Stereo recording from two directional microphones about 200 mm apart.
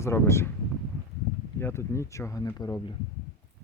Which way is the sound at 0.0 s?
15° left (ahead or behind).